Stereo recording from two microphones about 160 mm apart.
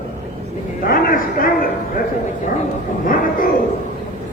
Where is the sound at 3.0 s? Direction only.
55° left (ahead or behind).